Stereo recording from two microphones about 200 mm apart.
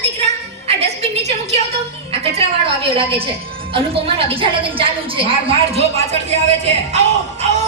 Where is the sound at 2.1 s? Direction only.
30° right (ahead or behind).